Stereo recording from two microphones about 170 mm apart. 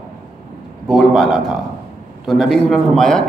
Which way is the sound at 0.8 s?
Centre (ahead or behind).